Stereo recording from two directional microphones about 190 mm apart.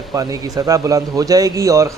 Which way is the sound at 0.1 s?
20° right (ahead or behind).